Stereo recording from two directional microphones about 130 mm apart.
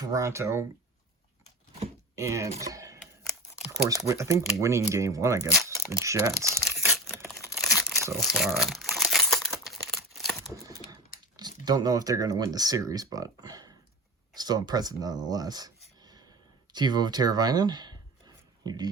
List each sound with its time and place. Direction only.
0.0 s speech: 25° right (ahead or behind)
2.1 s speech: 25° right (ahead or behind)
2.6 s typing: 25° right (ahead or behind)
3.7 s speech: 25° right (ahead or behind)
7.3 s crumpling: centre (ahead or behind)
11.3 s speech: 30° right (ahead or behind)
16.0 s a sound: 30° right (ahead or behind)
16.7 s speech: 35° right (ahead or behind)